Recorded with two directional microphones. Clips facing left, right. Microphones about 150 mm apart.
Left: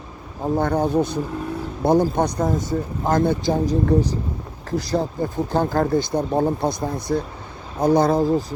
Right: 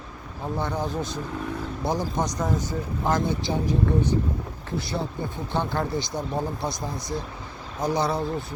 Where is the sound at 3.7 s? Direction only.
35° left (ahead or behind).